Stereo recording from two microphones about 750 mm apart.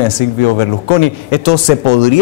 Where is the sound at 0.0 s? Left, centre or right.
Left.